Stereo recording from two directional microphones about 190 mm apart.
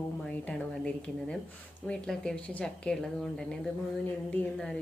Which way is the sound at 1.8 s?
5° left (ahead or behind).